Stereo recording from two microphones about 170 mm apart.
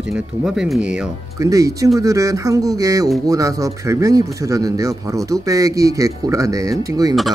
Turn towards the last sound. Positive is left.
turn(degrees=-20)  # may be behind; listen again after turning